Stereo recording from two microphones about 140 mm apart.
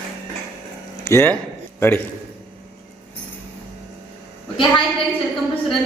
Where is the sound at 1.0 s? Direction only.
20° left (ahead or behind).